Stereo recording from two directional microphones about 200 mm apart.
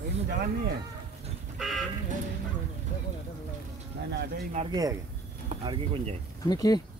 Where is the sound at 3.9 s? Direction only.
55° right (ahead or behind).